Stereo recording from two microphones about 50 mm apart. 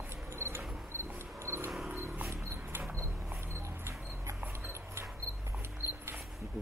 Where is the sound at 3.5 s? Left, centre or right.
Right.